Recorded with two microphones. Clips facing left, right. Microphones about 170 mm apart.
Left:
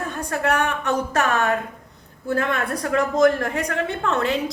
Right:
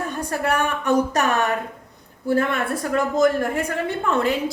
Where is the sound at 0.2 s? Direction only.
10° right (ahead or behind).